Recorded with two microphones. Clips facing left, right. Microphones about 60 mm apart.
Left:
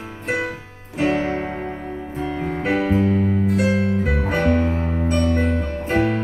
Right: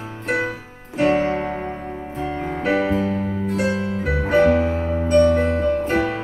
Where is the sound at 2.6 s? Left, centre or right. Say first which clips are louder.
Right 1 dB; right.